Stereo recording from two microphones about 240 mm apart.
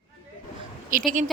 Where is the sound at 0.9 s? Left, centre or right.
Right.